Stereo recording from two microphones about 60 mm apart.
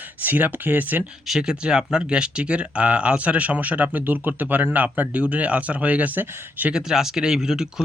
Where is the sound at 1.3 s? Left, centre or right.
Centre; by 6.7 s right.